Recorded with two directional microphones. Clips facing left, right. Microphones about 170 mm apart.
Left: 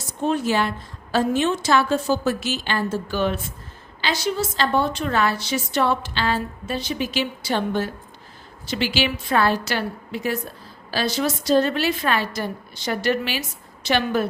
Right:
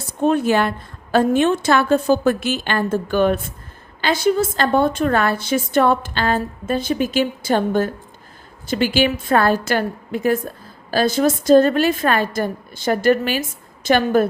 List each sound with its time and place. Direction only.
0.0 s a woman's voice: 55° right (ahead or behind)